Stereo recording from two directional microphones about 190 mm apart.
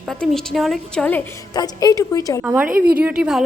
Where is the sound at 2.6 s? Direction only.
50° right (ahead or behind).